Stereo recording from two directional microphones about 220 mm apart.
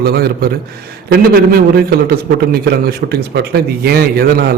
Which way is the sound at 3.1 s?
45° right (ahead or behind).